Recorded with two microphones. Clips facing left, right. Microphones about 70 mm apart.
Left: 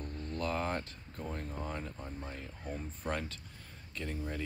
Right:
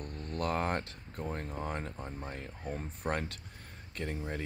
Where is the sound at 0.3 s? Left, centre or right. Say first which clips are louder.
Right 3 dB; right.